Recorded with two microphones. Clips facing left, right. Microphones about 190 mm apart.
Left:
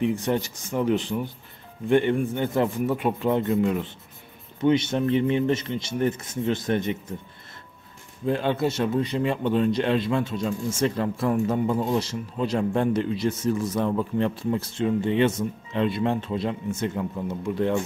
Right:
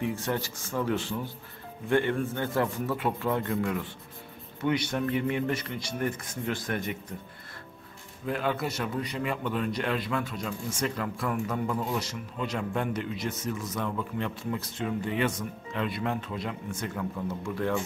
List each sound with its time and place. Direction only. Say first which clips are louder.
0.0 s a man's voice: left 6 dB; 20° left (ahead or behind)
8.3 s a man's voice: left 6 dB; 30° left (ahead or behind)